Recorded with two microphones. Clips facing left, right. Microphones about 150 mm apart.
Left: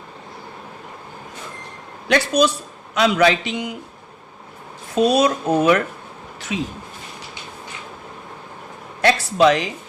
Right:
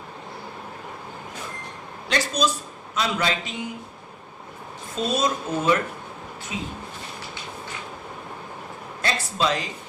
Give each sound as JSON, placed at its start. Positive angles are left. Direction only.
{"t": 2.0, "sound": "a man's voice", "side_deg": 65}
{"t": 4.9, "sound": "a man's voice", "side_deg": 75}
{"t": 6.5, "sound": "speech", "side_deg": 90}
{"t": 9.0, "sound": "a man's voice", "side_deg": 70}